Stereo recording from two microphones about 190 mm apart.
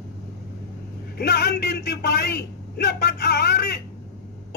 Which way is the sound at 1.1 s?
55° left (ahead or behind).